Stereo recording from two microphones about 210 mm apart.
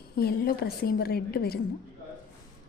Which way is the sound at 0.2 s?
45° left (ahead or behind).